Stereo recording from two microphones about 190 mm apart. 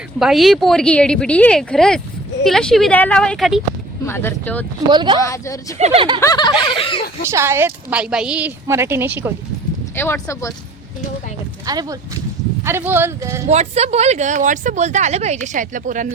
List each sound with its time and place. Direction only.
0.2 s speech: centre (ahead or behind)
4.0 s speech: 10° left (ahead or behind)
4.9 s speech: 25° right (ahead or behind)
5.2 s speech: 15° left (ahead or behind)
5.7 s speech: 35° right (ahead or behind)
6.1 s snicker: 20° left (ahead or behind)
7.3 s speech: 15° right (ahead or behind)
9.9 s speech: 10° left (ahead or behind)
11.6 s speech: 20° right (ahead or behind)
13.5 s speech: 35° right (ahead or behind)